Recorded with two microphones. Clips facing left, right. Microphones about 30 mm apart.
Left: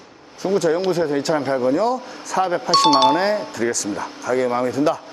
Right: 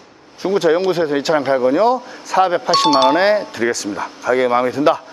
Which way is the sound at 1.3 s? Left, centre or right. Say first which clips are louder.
Right 6 dB; right.